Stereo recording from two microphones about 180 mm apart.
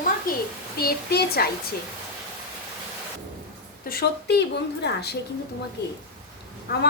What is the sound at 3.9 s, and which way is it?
A woman's voice, 60° left (ahead or behind).